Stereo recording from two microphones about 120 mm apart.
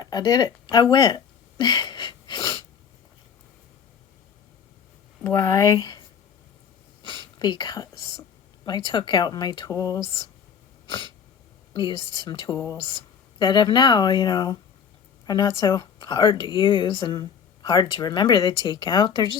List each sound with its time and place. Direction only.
0.0 s a sound: 35° left (ahead or behind)
5.2 s speech: 25° left (ahead or behind)
5.7 s speech: 35° left (ahead or behind)
10.8 s sneeze: 40° left (ahead or behind)
11.7 s speech: 40° left (ahead or behind)